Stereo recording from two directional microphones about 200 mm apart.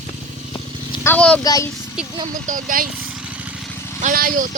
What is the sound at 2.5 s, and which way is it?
Speech, 45° right (ahead or behind).